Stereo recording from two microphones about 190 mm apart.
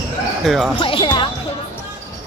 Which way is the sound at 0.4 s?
Centre (ahead or behind).